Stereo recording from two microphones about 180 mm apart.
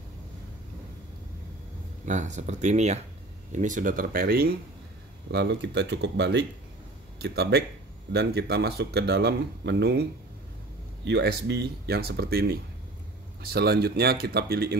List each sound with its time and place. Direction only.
2.0 s speech: 40° right (ahead or behind)
5.3 s speech: 70° right (ahead or behind)
11.1 s speech: 70° right (ahead or behind)